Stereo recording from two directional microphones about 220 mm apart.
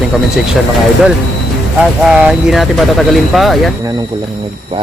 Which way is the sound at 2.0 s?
5° right (ahead or behind).